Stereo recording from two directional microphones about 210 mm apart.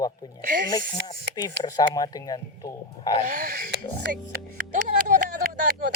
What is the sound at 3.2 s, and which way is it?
Music, 35° right (ahead or behind).